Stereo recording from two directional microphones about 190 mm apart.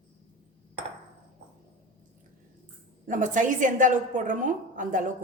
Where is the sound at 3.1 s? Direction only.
40° right (ahead or behind).